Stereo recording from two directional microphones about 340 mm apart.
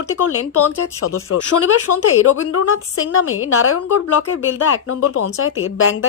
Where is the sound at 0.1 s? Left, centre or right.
Left.